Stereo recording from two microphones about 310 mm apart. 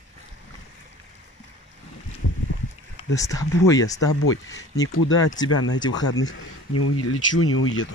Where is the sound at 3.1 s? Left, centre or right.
Centre.